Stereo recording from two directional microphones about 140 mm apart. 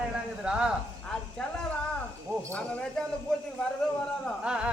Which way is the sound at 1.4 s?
5° left (ahead or behind).